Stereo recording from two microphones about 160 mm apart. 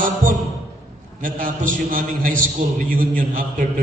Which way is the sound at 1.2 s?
60° right (ahead or behind).